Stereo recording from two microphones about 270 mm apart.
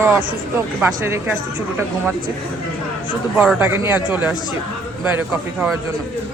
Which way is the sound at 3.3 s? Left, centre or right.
Centre.